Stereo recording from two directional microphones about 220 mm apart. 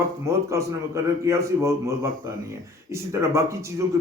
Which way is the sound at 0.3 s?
15° right (ahead or behind).